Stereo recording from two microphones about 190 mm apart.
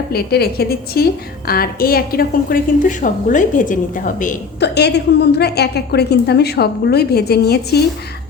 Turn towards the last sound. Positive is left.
turn(degrees=60)  # may be behind; listen again after turning